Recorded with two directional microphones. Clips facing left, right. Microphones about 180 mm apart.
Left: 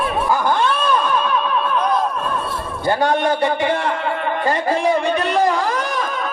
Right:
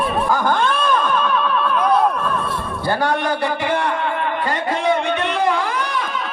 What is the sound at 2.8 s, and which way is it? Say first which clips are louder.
A man's voice: left 3 dB; 20° left (ahead or behind).